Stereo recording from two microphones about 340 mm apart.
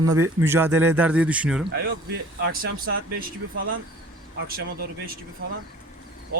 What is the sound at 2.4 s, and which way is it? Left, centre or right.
Speech, right.